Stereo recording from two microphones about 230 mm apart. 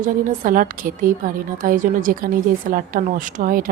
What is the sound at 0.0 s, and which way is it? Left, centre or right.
A woman's voice, right.